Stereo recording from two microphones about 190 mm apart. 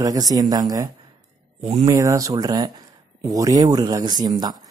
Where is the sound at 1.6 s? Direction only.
35° right (ahead or behind).